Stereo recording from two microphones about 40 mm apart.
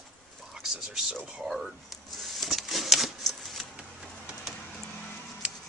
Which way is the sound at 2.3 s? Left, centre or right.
Centre.